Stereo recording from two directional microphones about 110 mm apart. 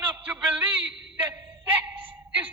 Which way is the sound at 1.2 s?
15° right (ahead or behind).